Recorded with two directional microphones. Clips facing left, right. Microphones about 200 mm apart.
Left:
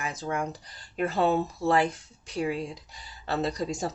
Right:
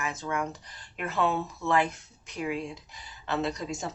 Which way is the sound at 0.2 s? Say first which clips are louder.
Left 1 dB; 40° left (ahead or behind).